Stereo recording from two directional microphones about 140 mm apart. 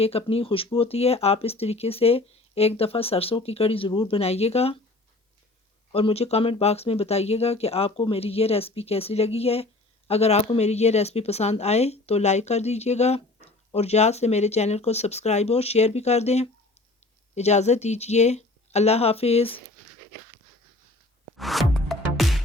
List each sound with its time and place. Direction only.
0.0 s speech: 45° left (ahead or behind)
5.9 s speech: 45° left (ahead or behind)
21.3 s music: centre (ahead or behind)